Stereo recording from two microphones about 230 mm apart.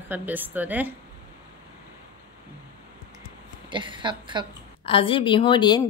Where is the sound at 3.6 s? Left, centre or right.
Right.